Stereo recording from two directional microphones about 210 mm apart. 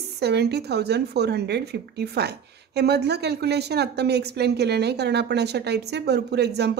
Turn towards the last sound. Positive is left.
turn(degrees=-50)  # may be behind; listen again after turning